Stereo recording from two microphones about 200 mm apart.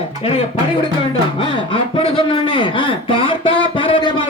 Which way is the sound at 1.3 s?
25° left (ahead or behind).